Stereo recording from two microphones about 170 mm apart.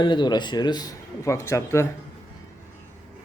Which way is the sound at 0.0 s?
25° left (ahead or behind).